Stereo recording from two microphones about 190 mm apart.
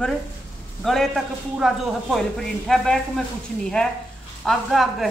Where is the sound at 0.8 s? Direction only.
Centre (ahead or behind).